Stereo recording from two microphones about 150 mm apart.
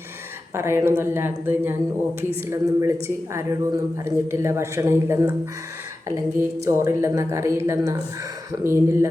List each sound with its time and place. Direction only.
0.5 s a man's voice: 15° right (ahead or behind)